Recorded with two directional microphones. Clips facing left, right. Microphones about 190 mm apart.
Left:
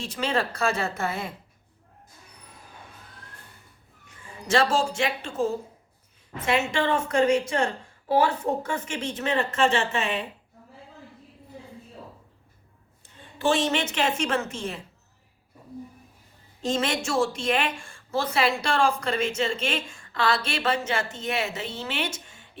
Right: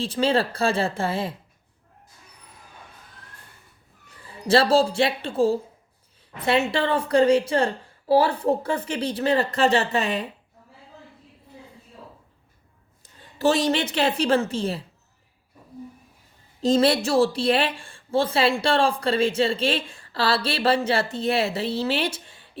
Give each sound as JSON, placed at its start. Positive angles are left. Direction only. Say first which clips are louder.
{"t": 0.0, "sound": "speech", "louder": "right 5 dB", "side_deg": -30}
{"t": 4.0, "sound": "speech", "louder": "right 7 dB", "side_deg": -35}
{"t": 13.4, "sound": "speech", "louder": "right 3 dB", "side_deg": -40}
{"t": 16.6, "sound": "speech", "louder": "right 7 dB", "side_deg": -35}